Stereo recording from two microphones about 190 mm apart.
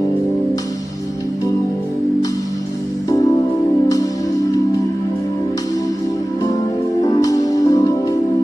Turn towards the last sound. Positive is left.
turn(degrees=20)  # may be behind; listen again after turning